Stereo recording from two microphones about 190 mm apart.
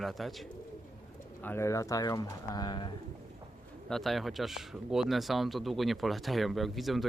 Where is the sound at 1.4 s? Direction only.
10° left (ahead or behind).